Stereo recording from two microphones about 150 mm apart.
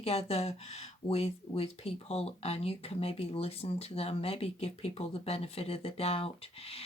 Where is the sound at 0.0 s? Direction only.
45° left (ahead or behind).